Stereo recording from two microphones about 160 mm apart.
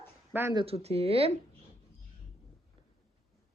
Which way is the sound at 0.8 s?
40° right (ahead or behind).